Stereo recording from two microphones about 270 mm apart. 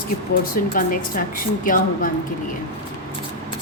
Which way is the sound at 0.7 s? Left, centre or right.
Left.